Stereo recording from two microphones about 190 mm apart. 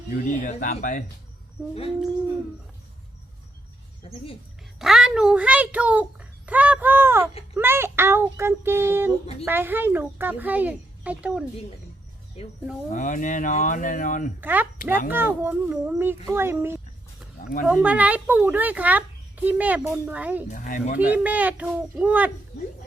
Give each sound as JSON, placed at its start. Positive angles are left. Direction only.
{"t": 0.1, "sound": "speech", "side_deg": 45}
{"t": 4.0, "sound": "speech", "side_deg": 30}
{"t": 4.8, "sound": "a child's voice", "side_deg": -5}
{"t": 12.9, "sound": "speech", "side_deg": 40}
{"t": 14.4, "sound": "a child's voice", "side_deg": -10}
{"t": 20.5, "sound": "speech", "side_deg": 45}
{"t": 21.0, "sound": "a child's voice", "side_deg": -10}